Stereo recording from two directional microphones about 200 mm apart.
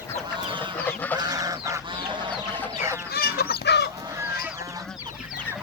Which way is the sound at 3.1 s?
50° left (ahead or behind).